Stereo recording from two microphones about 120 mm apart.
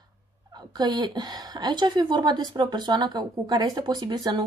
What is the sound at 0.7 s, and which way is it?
Speech, 40° right (ahead or behind).